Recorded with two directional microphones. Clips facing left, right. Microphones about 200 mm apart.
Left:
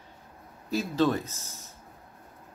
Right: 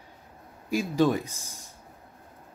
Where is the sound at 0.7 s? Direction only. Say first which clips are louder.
Right 2 dB; 10° right (ahead or behind).